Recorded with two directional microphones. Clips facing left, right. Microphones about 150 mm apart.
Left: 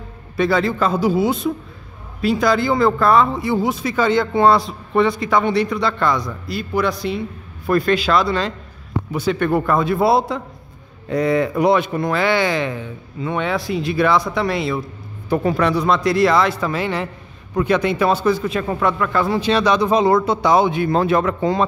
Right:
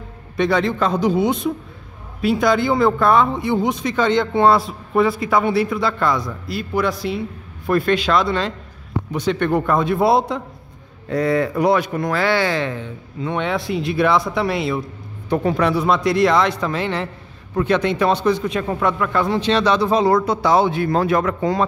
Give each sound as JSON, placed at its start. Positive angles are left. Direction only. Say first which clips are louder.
{"t": 0.4, "sound": "a man's voice", "louder": "even", "side_deg": 5}
{"t": 11.1, "sound": "a man's voice", "louder": "left 1 dB", "side_deg": 20}